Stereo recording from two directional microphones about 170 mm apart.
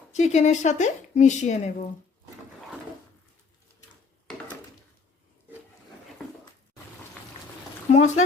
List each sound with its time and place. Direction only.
0.1 s speech: 45° left (ahead or behind)
7.9 s speech: 45° left (ahead or behind)